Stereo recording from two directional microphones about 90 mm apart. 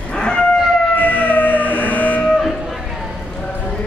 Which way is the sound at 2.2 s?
Centre (ahead or behind).